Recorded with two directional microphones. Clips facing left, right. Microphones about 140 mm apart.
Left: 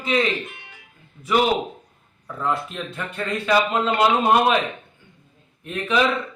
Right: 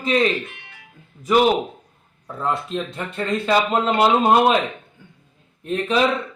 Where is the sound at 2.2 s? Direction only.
25° right (ahead or behind).